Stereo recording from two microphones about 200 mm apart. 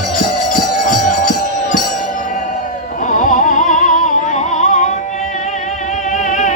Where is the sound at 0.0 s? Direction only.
40° left (ahead or behind).